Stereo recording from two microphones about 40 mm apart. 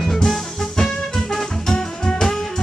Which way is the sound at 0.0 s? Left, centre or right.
Centre.